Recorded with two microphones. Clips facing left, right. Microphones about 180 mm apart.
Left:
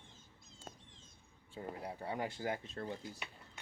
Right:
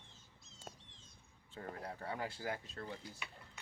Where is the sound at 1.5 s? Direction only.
15° left (ahead or behind).